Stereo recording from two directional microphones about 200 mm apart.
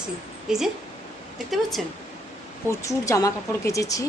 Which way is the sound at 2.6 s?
15° left (ahead or behind).